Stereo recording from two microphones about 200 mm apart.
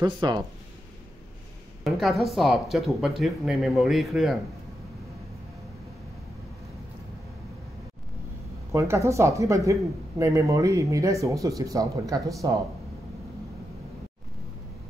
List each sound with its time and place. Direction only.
0.0 s speech: 20° right (ahead or behind)
1.9 s speech: centre (ahead or behind)
8.7 s speech: 15° right (ahead or behind)